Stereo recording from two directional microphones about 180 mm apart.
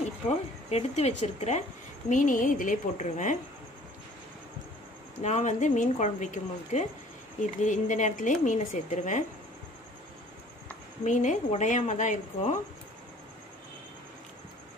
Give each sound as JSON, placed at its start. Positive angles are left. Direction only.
{"t": 0.7, "sound": "speech", "side_deg": 35}
{"t": 5.2, "sound": "speech", "side_deg": 40}
{"t": 11.1, "sound": "speech", "side_deg": 45}